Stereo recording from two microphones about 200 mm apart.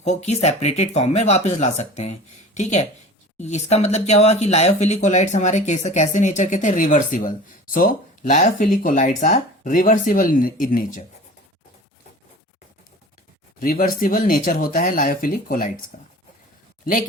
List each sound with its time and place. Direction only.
0.0 s speech: 35° left (ahead or behind)
13.6 s speech: 45° left (ahead or behind)